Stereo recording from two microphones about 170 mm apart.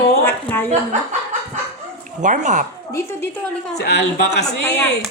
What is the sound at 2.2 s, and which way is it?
Speech, 45° right (ahead or behind).